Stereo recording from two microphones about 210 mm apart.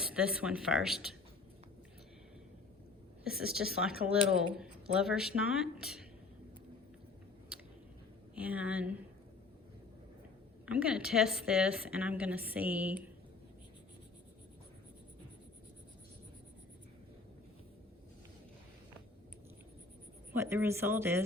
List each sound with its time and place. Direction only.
0.1 s speech: 5° right (ahead or behind)
3.5 s speech: 5° right (ahead or behind)
8.4 s a woman's voice: 5° right (ahead or behind)
10.7 s a woman's voice: 5° right (ahead or behind)
20.3 s a woman's voice: 10° right (ahead or behind)